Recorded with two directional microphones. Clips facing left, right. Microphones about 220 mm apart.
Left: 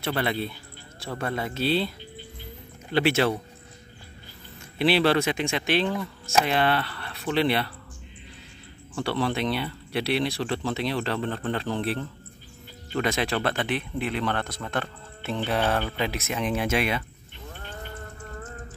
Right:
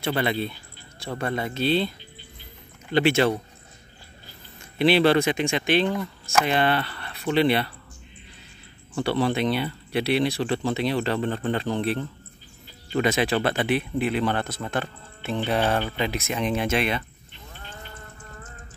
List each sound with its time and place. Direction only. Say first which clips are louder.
0.0 s speech: right 2 dB; centre (ahead or behind)
2.9 s speech: right 2 dB; 5° left (ahead or behind)
4.7 s speech: right 3 dB; centre (ahead or behind)
8.9 s speech: right 3 dB; centre (ahead or behind)
17.5 s livestock: left 4 dB; 50° left (ahead or behind)